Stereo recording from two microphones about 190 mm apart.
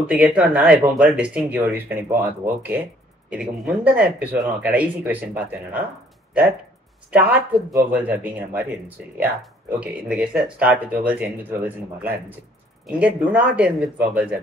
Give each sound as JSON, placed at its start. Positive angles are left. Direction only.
{"t": 0.0, "sound": "speech", "side_deg": -5}
{"t": 7.1, "sound": "speech", "side_deg": -10}